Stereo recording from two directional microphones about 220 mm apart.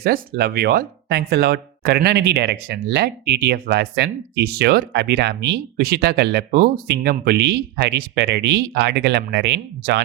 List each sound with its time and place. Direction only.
0.0 s speech: 45° right (ahead or behind)